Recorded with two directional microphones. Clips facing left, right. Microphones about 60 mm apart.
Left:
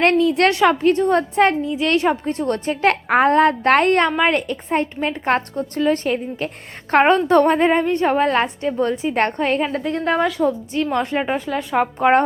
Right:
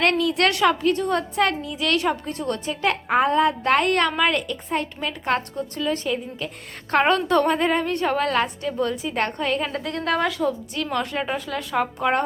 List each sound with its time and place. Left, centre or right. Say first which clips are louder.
0.0 s a woman's voice: left 5 dB; left
3.8 s a woman's voice: left 4 dB; left
6.9 s a woman's voice: left 5 dB; left
9.7 s a woman's voice: left 4 dB; left
11.9 s a woman's voice: left 9 dB; left